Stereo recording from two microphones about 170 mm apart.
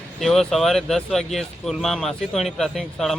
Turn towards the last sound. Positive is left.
turn(degrees=0)  # may be behind; listen again after turning